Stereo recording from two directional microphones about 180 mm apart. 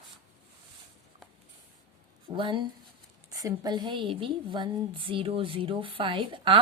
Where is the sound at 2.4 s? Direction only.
25° right (ahead or behind).